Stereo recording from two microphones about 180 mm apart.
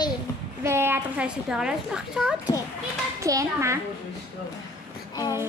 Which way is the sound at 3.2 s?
15° right (ahead or behind).